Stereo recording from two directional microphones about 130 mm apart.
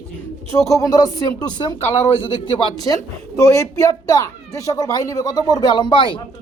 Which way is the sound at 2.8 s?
25° left (ahead or behind).